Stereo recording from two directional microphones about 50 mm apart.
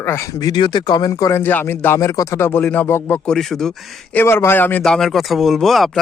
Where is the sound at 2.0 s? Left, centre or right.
Left.